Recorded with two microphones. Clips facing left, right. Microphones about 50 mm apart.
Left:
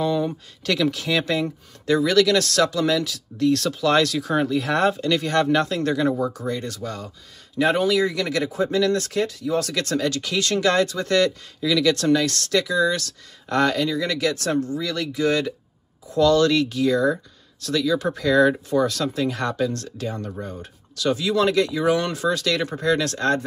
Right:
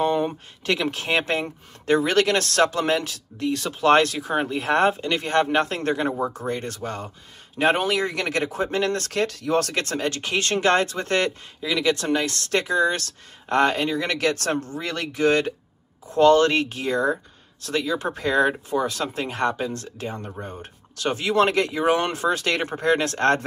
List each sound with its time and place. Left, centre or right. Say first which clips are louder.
0.0 s speech: right 1 dB; right
18.5 s speech: left 3 dB; right